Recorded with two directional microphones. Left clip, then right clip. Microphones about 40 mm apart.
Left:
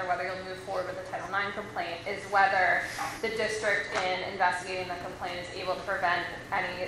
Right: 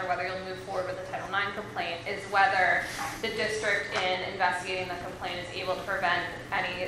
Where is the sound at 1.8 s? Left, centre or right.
Centre.